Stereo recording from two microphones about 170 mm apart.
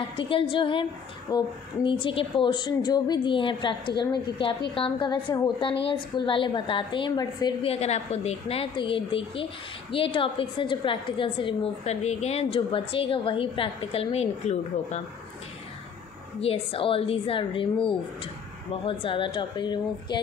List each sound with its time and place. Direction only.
0.1 s a woman's voice: 30° left (ahead or behind)
7.7 s a woman's voice: 40° left (ahead or behind)
16.3 s a woman's voice: 35° left (ahead or behind)